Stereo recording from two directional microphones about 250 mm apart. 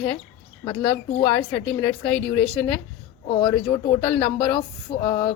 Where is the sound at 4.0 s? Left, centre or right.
Centre.